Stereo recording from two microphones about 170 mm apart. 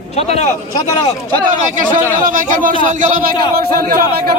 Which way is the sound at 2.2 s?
50° right (ahead or behind).